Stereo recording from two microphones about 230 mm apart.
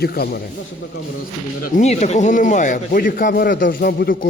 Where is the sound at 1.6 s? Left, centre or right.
Left.